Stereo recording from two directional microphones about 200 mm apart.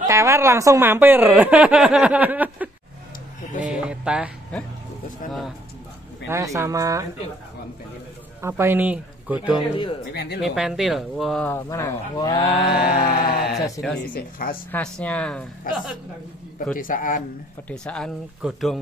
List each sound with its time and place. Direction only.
0.0 s speech: 15° right (ahead or behind)
3.6 s a sound: 5° right (ahead or behind)
6.2 s speech: 15° right (ahead or behind)
8.4 s speech: 10° right (ahead or behind)
9.5 s speech: 25° left (ahead or behind)
10.1 s speech: 55° left (ahead or behind)
10.4 s speech: 5° right (ahead or behind); by 12.4 s 20° left (ahead or behind)
13.1 s a woman's voice: 45° left (ahead or behind)
13.8 s speech: 20° left (ahead or behind)
14.1 s a woman's voice: 45° left (ahead or behind)
14.7 s speech: 5° left (ahead or behind)
15.7 s a woman's voice: 45° left (ahead or behind)
17.6 s speech: 5° left (ahead or behind)